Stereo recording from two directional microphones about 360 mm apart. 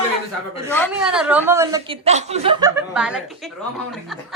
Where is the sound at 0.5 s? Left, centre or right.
Centre.